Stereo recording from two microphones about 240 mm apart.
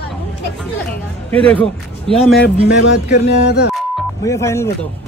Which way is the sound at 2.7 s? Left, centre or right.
Left.